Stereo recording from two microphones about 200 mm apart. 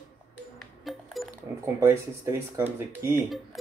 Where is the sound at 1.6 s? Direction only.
15° right (ahead or behind).